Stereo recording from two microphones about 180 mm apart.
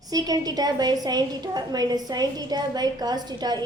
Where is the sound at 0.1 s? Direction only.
20° right (ahead or behind).